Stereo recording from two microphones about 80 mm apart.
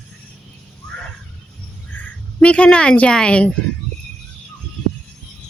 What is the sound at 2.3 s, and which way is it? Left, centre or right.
A woman's voice, centre.